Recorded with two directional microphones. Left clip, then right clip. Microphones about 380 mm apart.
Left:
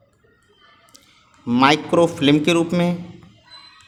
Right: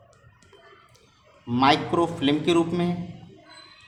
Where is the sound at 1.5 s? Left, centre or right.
Centre.